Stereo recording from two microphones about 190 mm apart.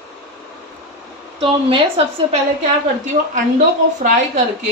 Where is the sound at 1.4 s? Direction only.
30° right (ahead or behind).